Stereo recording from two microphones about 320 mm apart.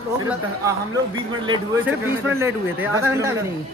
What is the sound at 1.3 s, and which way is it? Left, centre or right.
A man's voice, centre.